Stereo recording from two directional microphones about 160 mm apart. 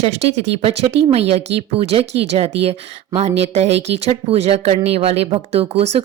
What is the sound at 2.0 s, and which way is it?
Speech, 90° right.